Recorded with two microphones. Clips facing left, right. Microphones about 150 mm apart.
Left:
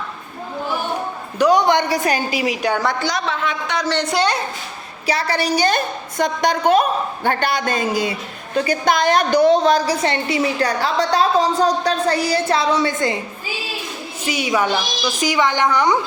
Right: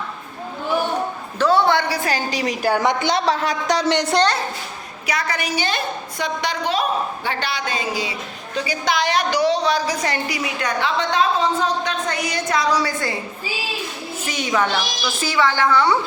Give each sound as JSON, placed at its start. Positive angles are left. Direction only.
{"t": 1.4, "sound": "a child's voice", "side_deg": 15}
{"t": 2.3, "sound": "a child's voice", "side_deg": 10}
{"t": 2.6, "sound": "a woman's voice", "side_deg": -5}
{"t": 2.8, "sound": "a man's voice", "side_deg": -20}
{"t": 5.0, "sound": "a woman's voice", "side_deg": 30}
{"t": 9.8, "sound": "a woman's voice", "side_deg": 30}
{"t": 14.3, "sound": "a child's voice", "side_deg": 10}